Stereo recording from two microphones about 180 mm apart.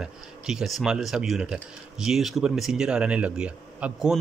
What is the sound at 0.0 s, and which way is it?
Speech, 5° right (ahead or behind).